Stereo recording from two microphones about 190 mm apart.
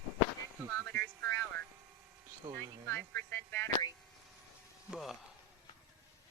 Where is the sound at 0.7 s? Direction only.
15° left (ahead or behind).